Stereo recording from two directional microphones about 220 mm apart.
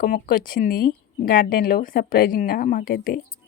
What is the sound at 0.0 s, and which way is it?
A woman's voice, 40° left (ahead or behind).